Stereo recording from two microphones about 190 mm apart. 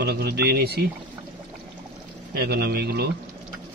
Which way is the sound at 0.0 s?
55° right (ahead or behind).